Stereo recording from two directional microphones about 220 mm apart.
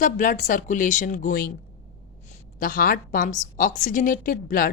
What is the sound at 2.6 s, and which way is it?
A woman's voice, 40° left (ahead or behind).